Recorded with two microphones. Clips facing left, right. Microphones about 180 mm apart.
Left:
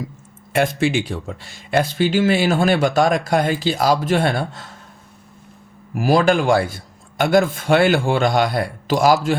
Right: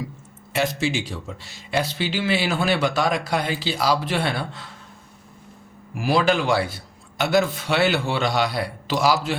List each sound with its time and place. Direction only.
0.5 s speech: 55° left (ahead or behind)
5.9 s speech: 45° left (ahead or behind)